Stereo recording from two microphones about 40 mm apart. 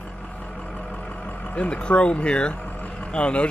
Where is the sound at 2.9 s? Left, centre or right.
Left.